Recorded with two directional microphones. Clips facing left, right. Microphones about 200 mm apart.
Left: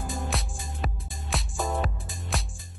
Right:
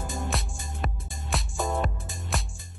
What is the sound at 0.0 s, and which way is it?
Music, centre (ahead or behind).